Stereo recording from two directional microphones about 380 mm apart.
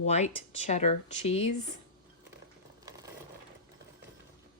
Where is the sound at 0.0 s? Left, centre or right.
Centre.